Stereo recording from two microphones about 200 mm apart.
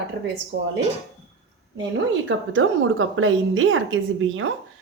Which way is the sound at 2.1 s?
75° right (ahead or behind).